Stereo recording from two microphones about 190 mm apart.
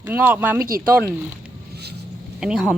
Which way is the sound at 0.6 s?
50° right (ahead or behind).